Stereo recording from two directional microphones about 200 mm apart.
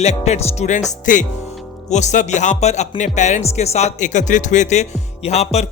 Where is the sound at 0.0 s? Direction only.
35° left (ahead or behind).